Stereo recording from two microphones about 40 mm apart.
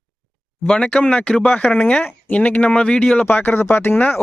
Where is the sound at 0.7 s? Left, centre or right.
Left.